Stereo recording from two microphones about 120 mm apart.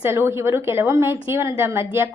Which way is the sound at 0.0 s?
20° right (ahead or behind).